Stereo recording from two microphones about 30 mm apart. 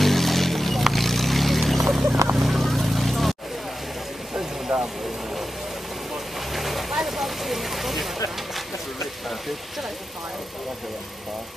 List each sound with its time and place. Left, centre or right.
0.0 s boat: centre
2.4 s vehicle: centre
4.7 s vehicle: right
6.5 s vehicle: centre